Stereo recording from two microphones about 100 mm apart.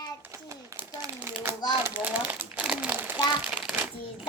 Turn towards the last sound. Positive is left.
turn(degrees=-10)  # may be behind; listen again after turning